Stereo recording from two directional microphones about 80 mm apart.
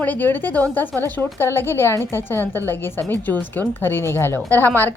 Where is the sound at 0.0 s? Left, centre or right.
Left.